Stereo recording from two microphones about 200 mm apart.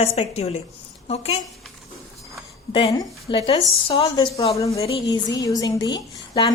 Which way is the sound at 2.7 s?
20° left (ahead or behind).